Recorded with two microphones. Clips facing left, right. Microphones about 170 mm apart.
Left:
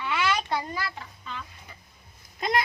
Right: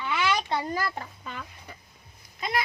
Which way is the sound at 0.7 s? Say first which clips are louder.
Right 4 dB; 50° right (ahead or behind).